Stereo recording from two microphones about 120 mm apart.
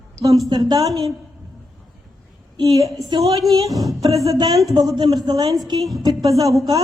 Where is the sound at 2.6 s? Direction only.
30° right (ahead or behind).